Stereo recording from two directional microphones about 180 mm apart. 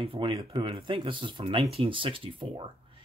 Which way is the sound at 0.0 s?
30° right (ahead or behind).